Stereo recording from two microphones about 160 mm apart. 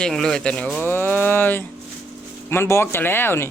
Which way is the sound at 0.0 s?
5° left (ahead or behind).